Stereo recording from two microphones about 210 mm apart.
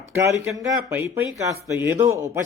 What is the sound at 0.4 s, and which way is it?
Speech, 15° right (ahead or behind).